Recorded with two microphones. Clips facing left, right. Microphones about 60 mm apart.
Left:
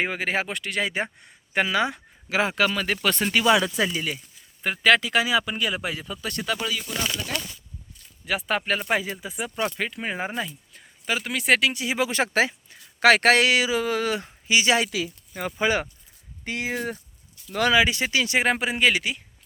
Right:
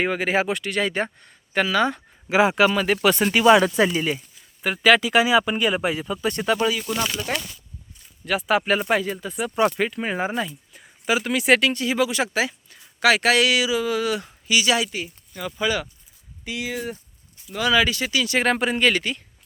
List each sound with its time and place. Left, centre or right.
0.0 s speech: centre
2.3 s speech: centre
3.9 s speech: right
4.6 s speech: centre; by 6.7 s right
6.8 s speech: right
8.2 s speech: centre
8.9 s speech: centre
11.7 s speech: centre
11.9 s speech: left
16.4 s speech: left
17.7 s speech: left
18.3 s speech: centre